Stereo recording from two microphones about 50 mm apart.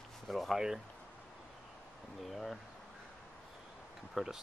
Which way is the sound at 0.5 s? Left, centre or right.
Centre.